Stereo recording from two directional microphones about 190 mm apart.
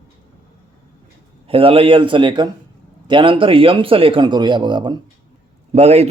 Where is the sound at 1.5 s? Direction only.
30° right (ahead or behind).